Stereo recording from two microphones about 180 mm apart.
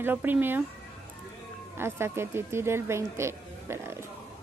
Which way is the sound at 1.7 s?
15° right (ahead or behind).